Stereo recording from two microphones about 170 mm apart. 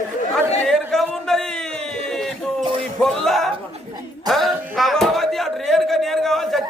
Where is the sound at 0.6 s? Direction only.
Centre (ahead or behind).